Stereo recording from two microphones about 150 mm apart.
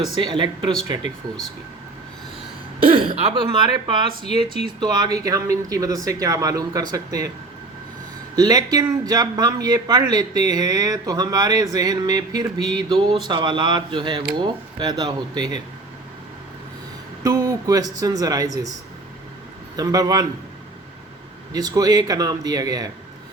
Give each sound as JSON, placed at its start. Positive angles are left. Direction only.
{"t": 0.2, "sound": "speech", "side_deg": -30}
{"t": 2.9, "sound": "speech", "side_deg": -35}
{"t": 8.4, "sound": "speech", "side_deg": -25}
{"t": 17.2, "sound": "speech", "side_deg": -20}
{"t": 19.7, "sound": "speech", "side_deg": -25}
{"t": 21.5, "sound": "speech", "side_deg": -25}